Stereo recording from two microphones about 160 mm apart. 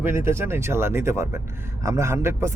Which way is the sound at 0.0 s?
15° right (ahead or behind).